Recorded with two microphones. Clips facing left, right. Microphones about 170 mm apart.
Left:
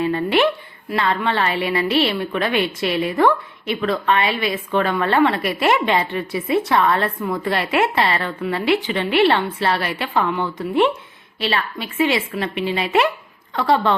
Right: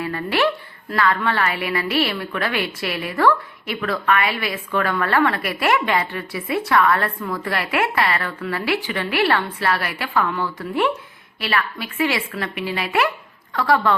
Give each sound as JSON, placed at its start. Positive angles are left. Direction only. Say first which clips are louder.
{"t": 0.0, "sound": "a woman's voice", "louder": "left 3 dB", "side_deg": 25}